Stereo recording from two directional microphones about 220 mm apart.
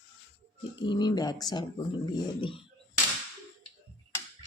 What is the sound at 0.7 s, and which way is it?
Speech, 20° left (ahead or behind).